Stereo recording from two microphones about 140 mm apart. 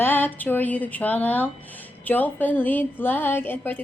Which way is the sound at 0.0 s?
15° left (ahead or behind).